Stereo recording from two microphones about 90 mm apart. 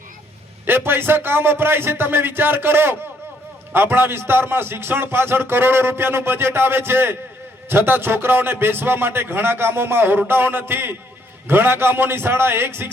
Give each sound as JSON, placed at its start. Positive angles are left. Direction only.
{"t": 0.6, "sound": "a man's voice", "side_deg": -25}